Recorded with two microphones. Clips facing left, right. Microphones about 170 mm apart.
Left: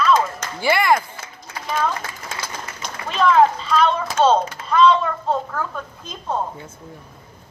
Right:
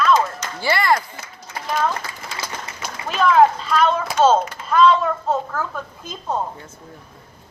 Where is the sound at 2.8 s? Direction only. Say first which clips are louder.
Even; 5° right (ahead or behind).